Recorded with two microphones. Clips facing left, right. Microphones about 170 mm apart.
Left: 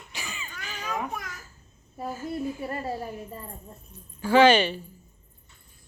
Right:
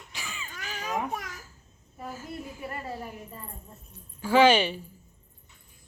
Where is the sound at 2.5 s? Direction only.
35° left (ahead or behind).